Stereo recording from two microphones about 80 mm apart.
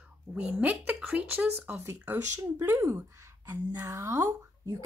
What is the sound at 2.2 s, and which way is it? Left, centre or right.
A woman's voice, right.